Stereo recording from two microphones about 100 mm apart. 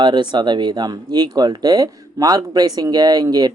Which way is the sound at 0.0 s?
50° right (ahead or behind).